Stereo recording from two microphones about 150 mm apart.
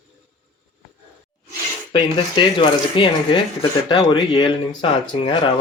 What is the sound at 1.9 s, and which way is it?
Speech, 35° left (ahead or behind).